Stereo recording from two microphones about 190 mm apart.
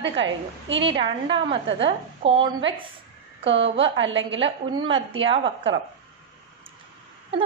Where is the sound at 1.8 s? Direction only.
30° right (ahead or behind).